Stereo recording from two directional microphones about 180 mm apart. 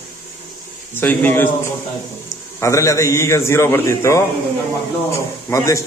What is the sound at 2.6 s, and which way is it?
A man's voice, 15° left (ahead or behind).